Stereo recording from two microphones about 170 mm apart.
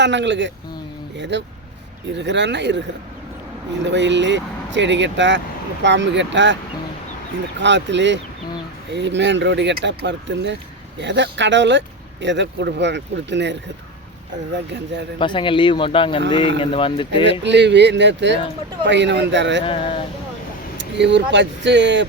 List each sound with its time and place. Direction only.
0.0 s speech: 90° right
3.8 s speech: 90° right
7.6 s speech: 90° right
15.2 s speech: 30° left (ahead or behind)
17.4 s speech: 90° right
19.6 s speech: 35° left (ahead or behind)
20.7 s speech: 90° right